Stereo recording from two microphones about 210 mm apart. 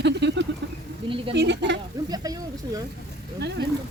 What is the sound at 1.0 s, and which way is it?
Speech, 25° right (ahead or behind).